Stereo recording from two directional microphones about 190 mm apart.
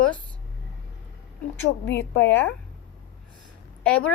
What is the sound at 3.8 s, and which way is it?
Speech, 5° left (ahead or behind).